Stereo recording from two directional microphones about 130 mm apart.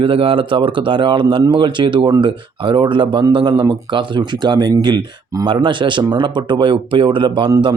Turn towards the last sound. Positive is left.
turn(degrees=-30)  # may be behind; listen again after turning